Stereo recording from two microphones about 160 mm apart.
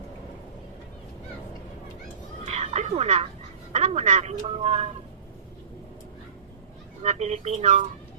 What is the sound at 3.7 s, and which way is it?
Speech, 45° right (ahead or behind).